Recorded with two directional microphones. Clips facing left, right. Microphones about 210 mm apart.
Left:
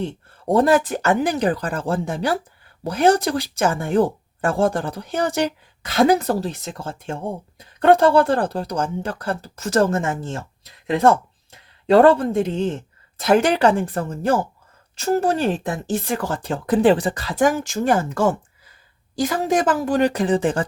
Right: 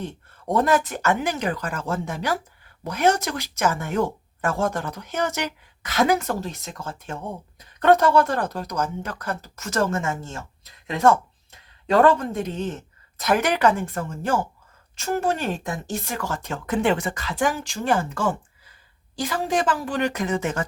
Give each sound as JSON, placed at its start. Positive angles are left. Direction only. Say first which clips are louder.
{"t": 0.0, "sound": "speech", "louder": "left 6 dB", "side_deg": 30}